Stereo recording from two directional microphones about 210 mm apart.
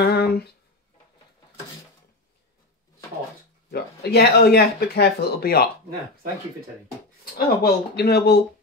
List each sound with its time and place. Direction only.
0.1 s a sound: 50° left (ahead or behind)
3.7 s speech: 50° left (ahead or behind)
7.3 s speech: 45° left (ahead or behind)